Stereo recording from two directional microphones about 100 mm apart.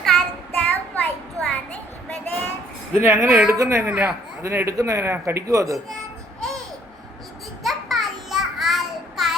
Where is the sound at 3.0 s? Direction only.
25° right (ahead or behind).